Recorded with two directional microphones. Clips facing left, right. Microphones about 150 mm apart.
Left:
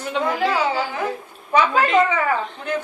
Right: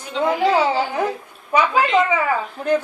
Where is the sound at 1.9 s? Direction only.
5° right (ahead or behind).